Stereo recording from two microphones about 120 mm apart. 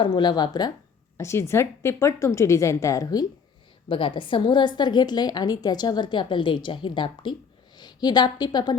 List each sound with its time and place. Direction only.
0.0 s a woman's voice: 35° left (ahead or behind)
1.1 s a woman's voice: 25° left (ahead or behind)
3.8 s a woman's voice: 45° left (ahead or behind)